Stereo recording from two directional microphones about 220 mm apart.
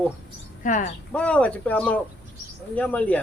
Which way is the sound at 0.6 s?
35° left (ahead or behind).